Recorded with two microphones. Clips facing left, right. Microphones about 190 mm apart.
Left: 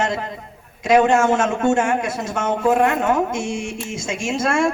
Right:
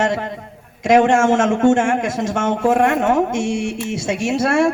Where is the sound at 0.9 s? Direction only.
90° right.